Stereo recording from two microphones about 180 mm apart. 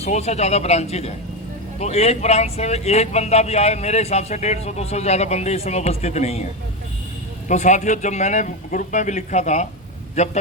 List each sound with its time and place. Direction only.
0.0 s speech: 35° left (ahead or behind)
7.4 s speech: 40° left (ahead or behind)